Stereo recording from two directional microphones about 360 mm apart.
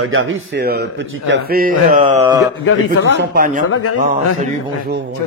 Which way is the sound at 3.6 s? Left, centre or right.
Left.